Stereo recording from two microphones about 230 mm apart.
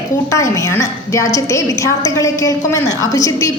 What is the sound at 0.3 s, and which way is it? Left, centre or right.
A woman's voice, centre.